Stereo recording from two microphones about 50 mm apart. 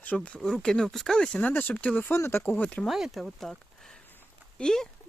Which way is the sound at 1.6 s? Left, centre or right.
Left.